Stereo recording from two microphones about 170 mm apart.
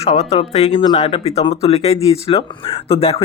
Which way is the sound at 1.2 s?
35° left (ahead or behind).